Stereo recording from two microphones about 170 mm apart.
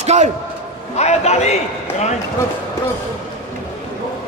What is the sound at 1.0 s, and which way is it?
Speech, 40° left (ahead or behind).